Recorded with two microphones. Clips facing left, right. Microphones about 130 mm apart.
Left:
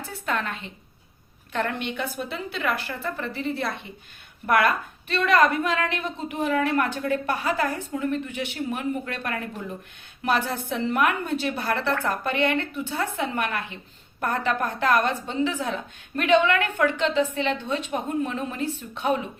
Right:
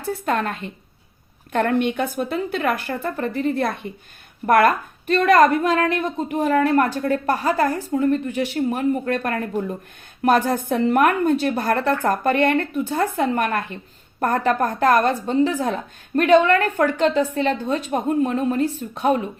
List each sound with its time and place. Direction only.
0.1 s a woman's voice: 40° right (ahead or behind)